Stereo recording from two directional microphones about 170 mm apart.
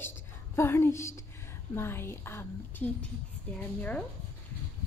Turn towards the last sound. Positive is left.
turn(degrees=5)  # may be behind; listen again after turning